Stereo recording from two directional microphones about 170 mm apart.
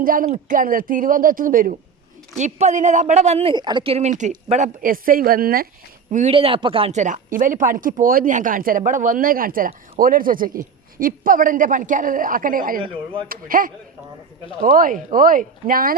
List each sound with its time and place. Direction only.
0.0 s speech: 55° right (ahead or behind)
2.4 s speech: 45° right (ahead or behind)
3.5 s speech: 25° right (ahead or behind); by 5.6 s 60° right (ahead or behind)
6.1 s a man's voice: 45° right (ahead or behind)
6.3 s speech: 30° right (ahead or behind); by 16.0 s 55° right (ahead or behind)